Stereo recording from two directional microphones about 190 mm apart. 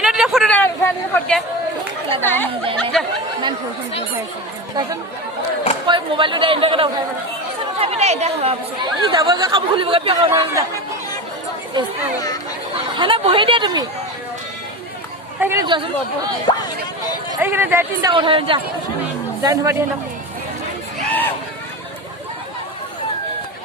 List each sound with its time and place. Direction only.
0.0 s a sound: 5° right (ahead or behind)
2.2 s speech: 10° left (ahead or behind)
5.8 s speech: 25° right (ahead or behind)
10.3 s speech: 15° right (ahead or behind)
12.7 s speech: 25° right (ahead or behind)
15.4 s speech: 10° right (ahead or behind)
15.6 s speech: 25° right (ahead or behind)
16.5 s speech: 25° left (ahead or behind)
17.4 s speech: 10° right (ahead or behind)
18.1 s speech: 25° right (ahead or behind)
19.4 s speech: 15° right (ahead or behind)
21.1 s a sound: 10° left (ahead or behind)